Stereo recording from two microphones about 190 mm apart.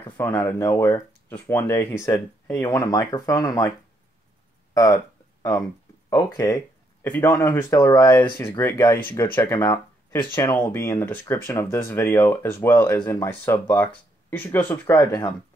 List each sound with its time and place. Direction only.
0.0 s speech: 10° left (ahead or behind)
4.7 s speech: 15° left (ahead or behind)